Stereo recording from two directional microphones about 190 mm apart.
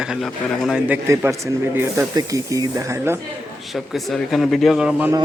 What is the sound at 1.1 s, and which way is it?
Speech, 15° right (ahead or behind).